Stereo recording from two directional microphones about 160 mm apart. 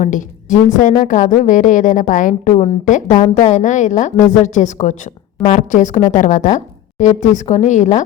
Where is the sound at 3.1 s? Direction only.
25° left (ahead or behind).